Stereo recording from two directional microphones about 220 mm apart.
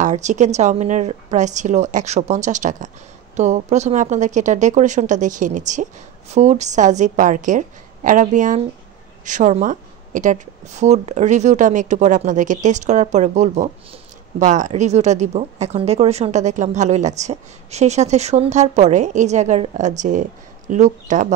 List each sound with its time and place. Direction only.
0.0 s speech: 35° right (ahead or behind)